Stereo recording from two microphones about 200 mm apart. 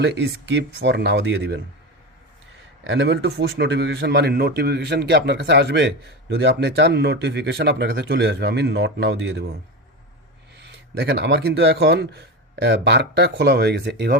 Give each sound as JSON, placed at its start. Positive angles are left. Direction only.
{"t": 0.0, "sound": "a man's voice", "side_deg": -55}
{"t": 2.8, "sound": "a man's voice", "side_deg": -60}
{"t": 10.7, "sound": "a man's voice", "side_deg": -55}